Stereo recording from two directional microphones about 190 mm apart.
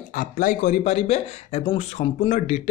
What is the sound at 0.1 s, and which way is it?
Speech, 50° left (ahead or behind).